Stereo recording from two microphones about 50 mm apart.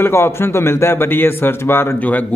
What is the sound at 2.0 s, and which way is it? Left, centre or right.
Speech, left.